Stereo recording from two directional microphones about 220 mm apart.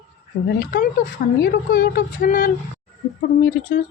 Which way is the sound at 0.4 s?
45° left (ahead or behind).